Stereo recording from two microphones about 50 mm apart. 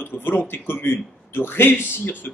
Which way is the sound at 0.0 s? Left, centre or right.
Left.